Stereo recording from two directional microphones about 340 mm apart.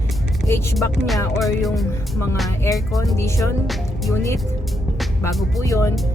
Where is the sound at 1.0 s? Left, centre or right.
Centre.